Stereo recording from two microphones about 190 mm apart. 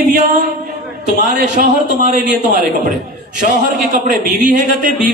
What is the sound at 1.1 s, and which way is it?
A man's voice, 40° right (ahead or behind).